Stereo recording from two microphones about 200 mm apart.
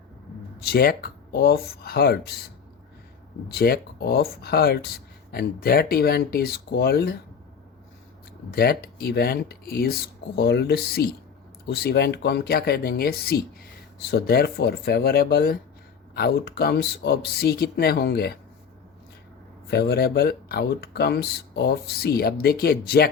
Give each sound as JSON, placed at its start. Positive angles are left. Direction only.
{"t": 0.6, "sound": "speech", "side_deg": 50}
{"t": 3.5, "sound": "speech", "side_deg": 50}
{"t": 8.4, "sound": "speech", "side_deg": 50}
{"t": 19.6, "sound": "speech", "side_deg": 55}